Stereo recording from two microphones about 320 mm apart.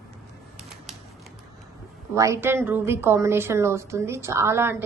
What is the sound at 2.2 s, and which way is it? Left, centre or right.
A woman's voice, centre.